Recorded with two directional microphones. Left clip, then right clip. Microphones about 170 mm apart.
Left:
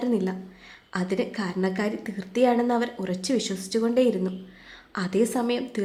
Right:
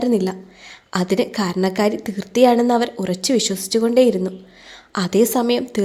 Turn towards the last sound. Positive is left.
turn(degrees=-35)  # may be behind; listen again after turning